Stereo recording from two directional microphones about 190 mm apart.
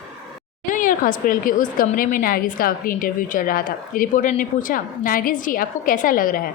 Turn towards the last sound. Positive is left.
turn(degrees=45)  # may be behind; listen again after turning